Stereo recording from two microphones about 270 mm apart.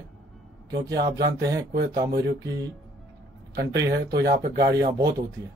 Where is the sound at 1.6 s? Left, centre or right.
Right.